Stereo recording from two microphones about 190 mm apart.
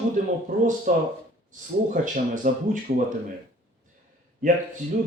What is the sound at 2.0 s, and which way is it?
Speech, 45° right (ahead or behind).